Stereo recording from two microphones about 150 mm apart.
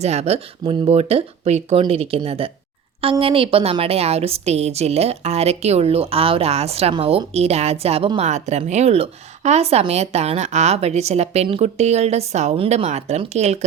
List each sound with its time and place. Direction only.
0.0 s a woman's voice: 45° right (ahead or behind)